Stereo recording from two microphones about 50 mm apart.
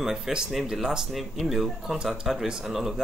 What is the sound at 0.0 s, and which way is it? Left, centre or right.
A man's voice, centre.